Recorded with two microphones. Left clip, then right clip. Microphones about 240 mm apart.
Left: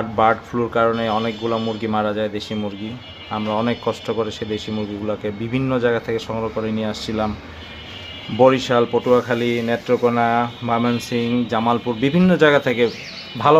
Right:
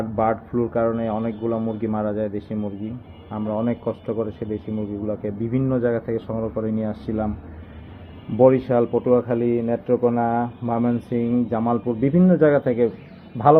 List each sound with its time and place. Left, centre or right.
0.2 s speech: centre
8.5 s speech: centre
8.8 s speech: centre